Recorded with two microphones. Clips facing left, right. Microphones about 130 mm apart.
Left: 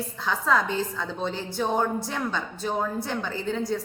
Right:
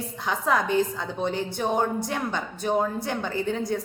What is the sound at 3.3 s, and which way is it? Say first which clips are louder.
Speech: right 4 dB; 55° right (ahead or behind).